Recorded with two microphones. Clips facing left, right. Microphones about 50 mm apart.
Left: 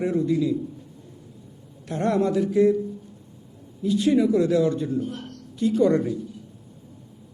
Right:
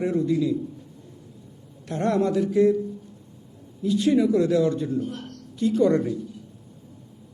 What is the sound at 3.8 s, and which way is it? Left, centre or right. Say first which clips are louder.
A man's voice: even; centre.